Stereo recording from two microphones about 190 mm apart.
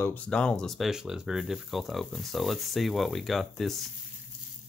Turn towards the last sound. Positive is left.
turn(degrees=0)  # may be behind; listen again after turning